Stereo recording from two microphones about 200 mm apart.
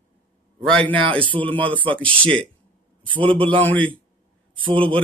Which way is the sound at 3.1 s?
25° right (ahead or behind).